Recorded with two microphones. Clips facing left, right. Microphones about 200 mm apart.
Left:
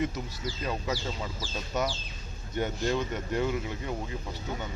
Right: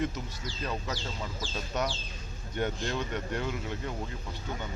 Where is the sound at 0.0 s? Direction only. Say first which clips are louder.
Left 2 dB; 10° left (ahead or behind).